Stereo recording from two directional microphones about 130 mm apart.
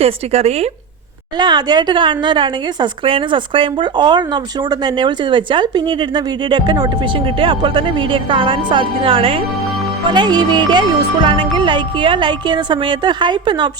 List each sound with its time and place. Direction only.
0.0 s speech: 55° right (ahead or behind)
1.4 s speech: 35° right (ahead or behind)
10.1 s speech: 35° right (ahead or behind)